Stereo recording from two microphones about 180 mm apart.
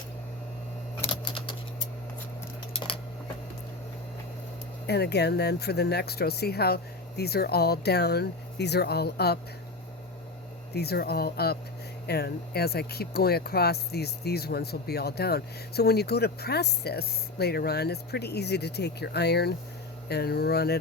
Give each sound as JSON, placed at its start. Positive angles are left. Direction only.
{"t": 1.1, "sound": "typing", "side_deg": 30}
{"t": 2.7, "sound": "a sound", "side_deg": 30}
{"t": 4.9, "sound": "speech", "side_deg": 65}
{"t": 10.8, "sound": "speech", "side_deg": 60}